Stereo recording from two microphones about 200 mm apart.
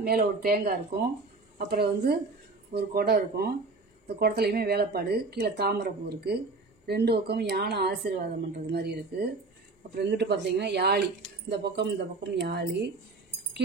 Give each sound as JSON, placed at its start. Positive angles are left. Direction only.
{"t": 0.0, "sound": "speech", "side_deg": -45}